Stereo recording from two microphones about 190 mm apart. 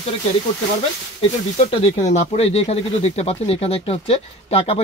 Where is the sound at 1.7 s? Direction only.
35° left (ahead or behind).